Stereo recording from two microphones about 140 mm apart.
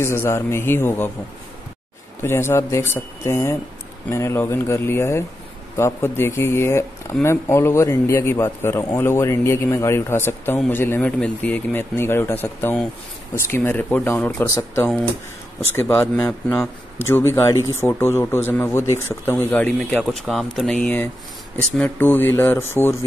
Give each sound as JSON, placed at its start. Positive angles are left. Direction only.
{"t": 0.0, "sound": "speech", "side_deg": 20}
{"t": 2.2, "sound": "speech", "side_deg": 15}
{"t": 15.6, "sound": "speech", "side_deg": 15}